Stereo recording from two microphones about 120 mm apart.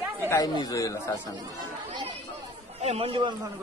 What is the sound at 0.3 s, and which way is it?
Speech, 30° left (ahead or behind).